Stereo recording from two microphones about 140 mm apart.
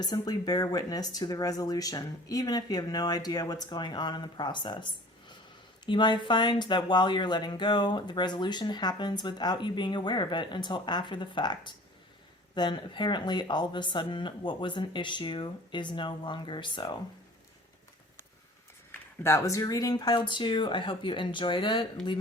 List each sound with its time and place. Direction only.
0.0 s speech: 30° left (ahead or behind)
18.9 s speech: 20° left (ahead or behind); by 21.8 s 35° left (ahead or behind)